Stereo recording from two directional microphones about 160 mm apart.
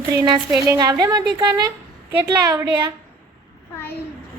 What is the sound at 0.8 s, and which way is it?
A woman's voice, 25° right (ahead or behind).